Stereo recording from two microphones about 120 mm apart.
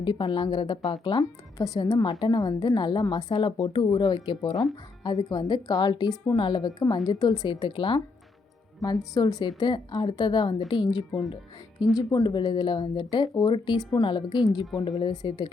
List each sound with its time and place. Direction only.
0.0 s a woman's voice: 40° left (ahead or behind)
8.8 s a woman's voice: 30° left (ahead or behind)